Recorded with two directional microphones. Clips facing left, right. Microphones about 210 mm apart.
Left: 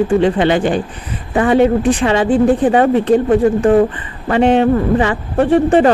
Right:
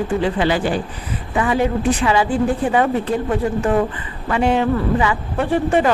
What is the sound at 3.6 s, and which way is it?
Speech, 35° left (ahead or behind).